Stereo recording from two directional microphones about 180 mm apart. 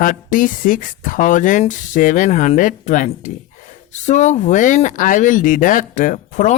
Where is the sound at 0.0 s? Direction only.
45° left (ahead or behind).